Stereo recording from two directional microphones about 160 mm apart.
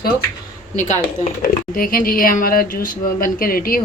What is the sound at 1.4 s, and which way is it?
Speech, 60° left (ahead or behind).